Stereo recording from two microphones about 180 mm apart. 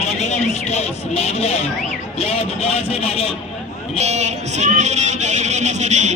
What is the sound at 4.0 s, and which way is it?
Speech, 40° right (ahead or behind).